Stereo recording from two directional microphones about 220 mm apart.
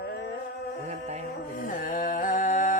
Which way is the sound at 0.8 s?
30° right (ahead or behind).